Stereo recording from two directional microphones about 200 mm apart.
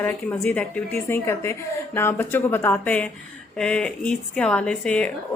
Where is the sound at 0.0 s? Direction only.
5° left (ahead or behind).